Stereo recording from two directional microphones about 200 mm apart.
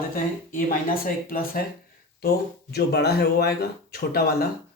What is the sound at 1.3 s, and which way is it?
Speech, 45° left (ahead or behind).